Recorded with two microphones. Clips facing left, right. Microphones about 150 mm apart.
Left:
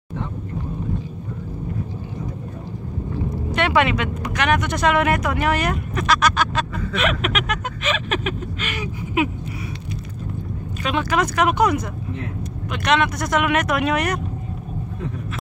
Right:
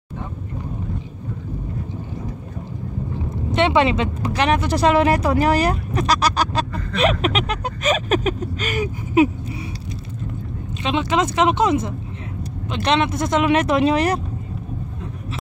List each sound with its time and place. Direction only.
3.5 s speech: 25° right (ahead or behind)
10.8 s speech: 25° right (ahead or behind)